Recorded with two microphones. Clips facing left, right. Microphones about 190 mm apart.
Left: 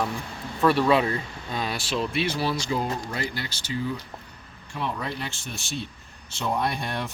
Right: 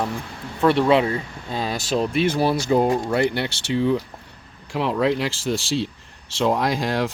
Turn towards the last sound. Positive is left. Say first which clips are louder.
# right 6 dB
turn(degrees=-90)